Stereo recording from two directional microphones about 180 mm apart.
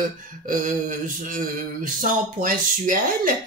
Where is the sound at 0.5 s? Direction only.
50° right (ahead or behind).